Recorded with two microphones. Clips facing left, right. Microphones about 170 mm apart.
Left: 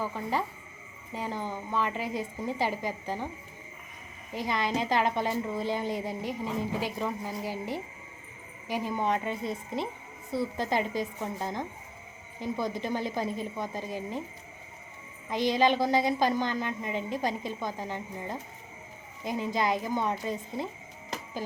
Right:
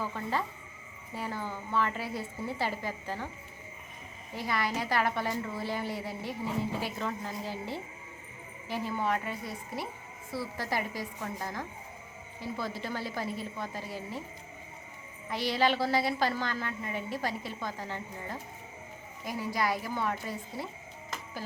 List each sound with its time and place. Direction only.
0.0 s a woman's voice: 15° left (ahead or behind)
4.4 s a woman's voice: 20° left (ahead or behind)
15.3 s a woman's voice: 20° left (ahead or behind)